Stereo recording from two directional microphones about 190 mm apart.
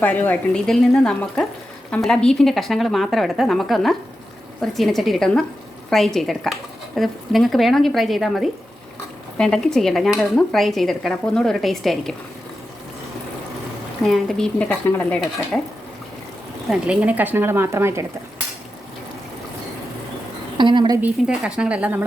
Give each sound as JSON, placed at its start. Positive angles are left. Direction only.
{"t": 0.0, "sound": "stir", "side_deg": 10}
{"t": 14.0, "sound": "stir", "side_deg": 0}
{"t": 16.6, "sound": "speech", "side_deg": -5}
{"t": 20.6, "sound": "speech", "side_deg": -25}
{"t": 21.0, "sound": "speech", "side_deg": -5}